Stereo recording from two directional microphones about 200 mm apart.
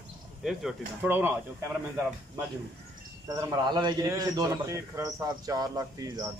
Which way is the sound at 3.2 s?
15° right (ahead or behind).